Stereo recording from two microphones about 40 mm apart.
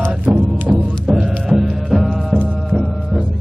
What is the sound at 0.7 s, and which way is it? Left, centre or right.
Music, right.